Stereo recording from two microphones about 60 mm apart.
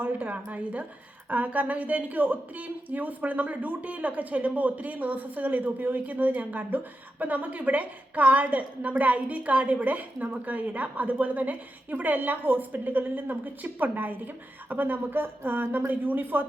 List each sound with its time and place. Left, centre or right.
0.0 s a woman's voice: right